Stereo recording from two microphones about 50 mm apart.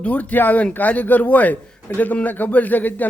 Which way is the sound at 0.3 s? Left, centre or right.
Left.